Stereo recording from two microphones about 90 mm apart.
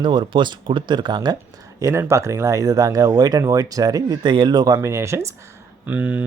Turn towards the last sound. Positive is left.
turn(degrees=-15)  # may be behind; listen again after turning